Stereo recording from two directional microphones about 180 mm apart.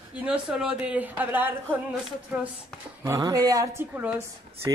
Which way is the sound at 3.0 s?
20° right (ahead or behind).